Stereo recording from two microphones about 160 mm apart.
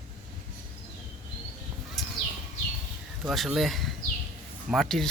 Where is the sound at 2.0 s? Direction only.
Centre (ahead or behind).